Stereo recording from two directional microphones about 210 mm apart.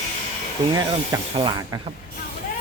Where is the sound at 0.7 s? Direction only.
20° right (ahead or behind).